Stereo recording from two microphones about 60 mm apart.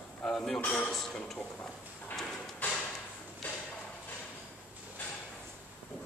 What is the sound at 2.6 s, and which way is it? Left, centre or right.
Drawer open or close, left.